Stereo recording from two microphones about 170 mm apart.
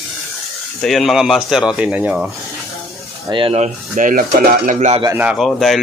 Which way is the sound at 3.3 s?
35° right (ahead or behind).